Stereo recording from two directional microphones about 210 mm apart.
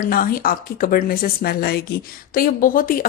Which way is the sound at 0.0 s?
45° left (ahead or behind).